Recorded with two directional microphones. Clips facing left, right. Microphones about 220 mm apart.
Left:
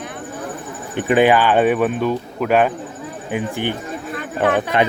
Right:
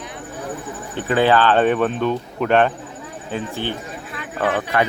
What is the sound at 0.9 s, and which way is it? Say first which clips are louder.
Speech: left 3 dB; 15° left (ahead or behind).